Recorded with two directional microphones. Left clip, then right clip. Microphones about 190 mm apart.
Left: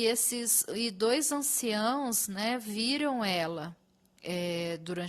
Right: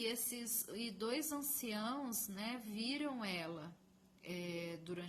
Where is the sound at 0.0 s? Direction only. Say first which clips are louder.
Left 13 dB; 50° left (ahead or behind).